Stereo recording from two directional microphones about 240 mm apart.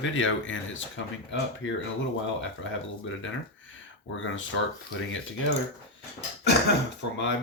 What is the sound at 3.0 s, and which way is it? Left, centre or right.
Speech, left.